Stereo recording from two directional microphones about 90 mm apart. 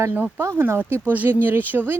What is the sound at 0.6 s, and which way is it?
Speech, 25° right (ahead or behind).